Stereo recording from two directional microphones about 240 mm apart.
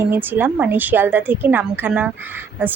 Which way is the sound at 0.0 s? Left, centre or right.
Centre.